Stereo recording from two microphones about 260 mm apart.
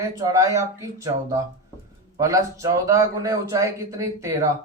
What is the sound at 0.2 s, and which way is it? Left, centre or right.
A man's voice, centre.